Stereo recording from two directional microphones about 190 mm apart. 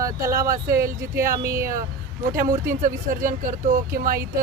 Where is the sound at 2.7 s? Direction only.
45° right (ahead or behind).